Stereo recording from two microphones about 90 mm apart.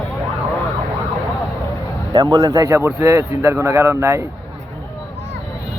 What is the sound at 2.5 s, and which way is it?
Speech, 35° right (ahead or behind).